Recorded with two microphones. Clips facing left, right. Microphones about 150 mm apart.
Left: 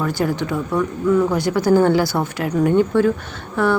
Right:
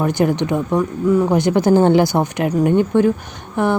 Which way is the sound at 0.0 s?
20° right (ahead or behind).